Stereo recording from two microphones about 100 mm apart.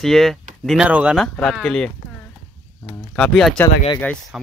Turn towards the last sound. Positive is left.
turn(degrees=-5)  # may be behind; listen again after turning